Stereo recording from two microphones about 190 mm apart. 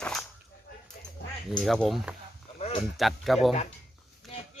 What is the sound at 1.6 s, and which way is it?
Speech, centre (ahead or behind).